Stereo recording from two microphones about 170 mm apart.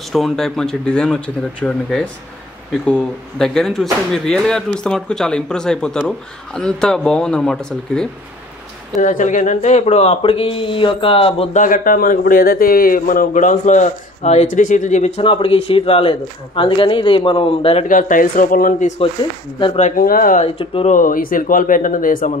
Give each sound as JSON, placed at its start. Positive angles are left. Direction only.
{"t": 0.1, "sound": "speech", "side_deg": 0}
{"t": 9.0, "sound": "a man's voice", "side_deg": 45}
{"t": 11.5, "sound": "speech", "side_deg": 50}
{"t": 15.2, "sound": "a man's voice", "side_deg": 30}
{"t": 17.8, "sound": "speech", "side_deg": 50}
{"t": 19.8, "sound": "speech", "side_deg": 55}
{"t": 20.5, "sound": "a man's voice", "side_deg": 35}
{"t": 20.9, "sound": "speech", "side_deg": 55}